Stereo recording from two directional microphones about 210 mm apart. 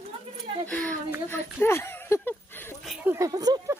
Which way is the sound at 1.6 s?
10° left (ahead or behind).